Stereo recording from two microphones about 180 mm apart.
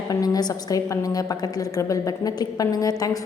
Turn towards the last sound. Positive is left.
turn(degrees=20)  # may be behind; listen again after turning